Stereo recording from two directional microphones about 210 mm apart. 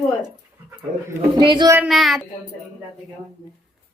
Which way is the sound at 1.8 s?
Centre (ahead or behind).